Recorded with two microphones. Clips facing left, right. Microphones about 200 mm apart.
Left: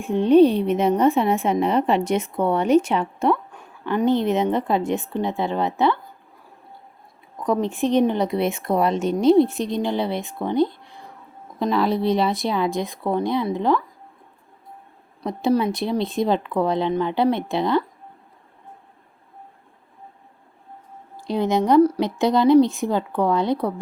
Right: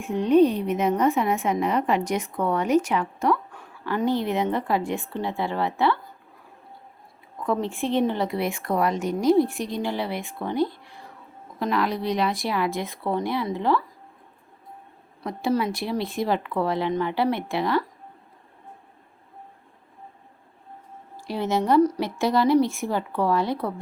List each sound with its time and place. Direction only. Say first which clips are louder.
0.0 s a woman's voice: left 4 dB; 30° left (ahead or behind)
7.3 s a woman's voice: left 4 dB; 15° left (ahead or behind)
15.2 s a woman's voice: left 4 dB; 20° left (ahead or behind)
21.2 s a woman's voice: left 4 dB; 15° left (ahead or behind)